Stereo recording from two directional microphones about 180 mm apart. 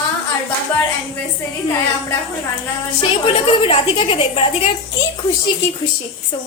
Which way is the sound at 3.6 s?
30° left (ahead or behind).